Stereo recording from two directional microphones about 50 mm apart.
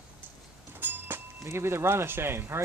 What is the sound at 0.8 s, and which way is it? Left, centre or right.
Vehicle, right.